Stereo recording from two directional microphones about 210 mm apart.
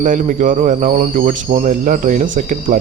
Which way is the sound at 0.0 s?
35° right (ahead or behind).